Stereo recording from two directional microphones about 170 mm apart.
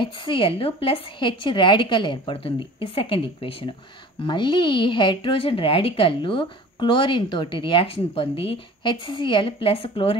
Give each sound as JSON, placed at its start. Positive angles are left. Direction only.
{"t": 0.0, "sound": "a woman's voice", "side_deg": 30}